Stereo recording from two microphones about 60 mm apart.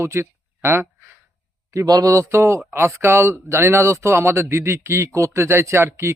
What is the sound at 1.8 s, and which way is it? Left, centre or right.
Speech, right.